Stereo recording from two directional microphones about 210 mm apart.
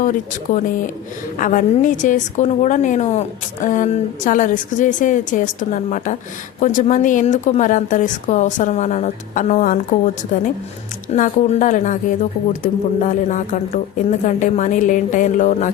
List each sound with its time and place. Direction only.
0.0 s a woman's voice: 40° left (ahead or behind)
11.1 s a woman's voice: 35° left (ahead or behind)